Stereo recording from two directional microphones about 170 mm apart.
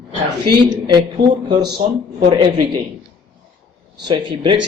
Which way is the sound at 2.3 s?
30° right (ahead or behind).